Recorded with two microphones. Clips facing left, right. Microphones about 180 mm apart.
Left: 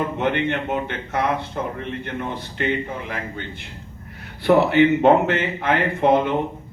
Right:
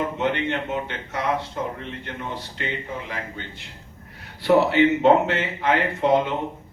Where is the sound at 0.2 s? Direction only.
55° left (ahead or behind).